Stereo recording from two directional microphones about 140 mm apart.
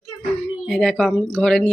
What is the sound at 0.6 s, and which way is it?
Speech, 5° left (ahead or behind).